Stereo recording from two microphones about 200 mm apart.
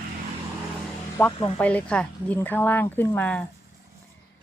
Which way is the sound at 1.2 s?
15° left (ahead or behind).